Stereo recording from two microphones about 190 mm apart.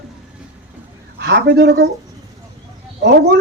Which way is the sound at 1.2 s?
60° right (ahead or behind).